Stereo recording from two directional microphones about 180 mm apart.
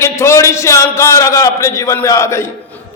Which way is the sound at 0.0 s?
15° left (ahead or behind).